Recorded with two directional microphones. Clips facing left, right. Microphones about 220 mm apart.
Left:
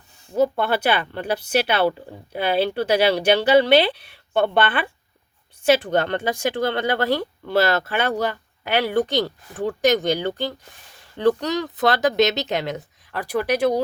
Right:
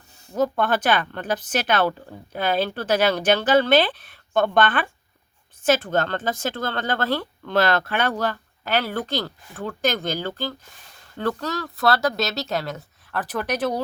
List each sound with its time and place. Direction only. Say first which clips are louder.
0.3 s speech: left 2 dB; 10° left (ahead or behind)